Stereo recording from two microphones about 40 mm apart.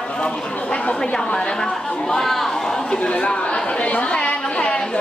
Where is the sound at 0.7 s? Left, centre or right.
Left.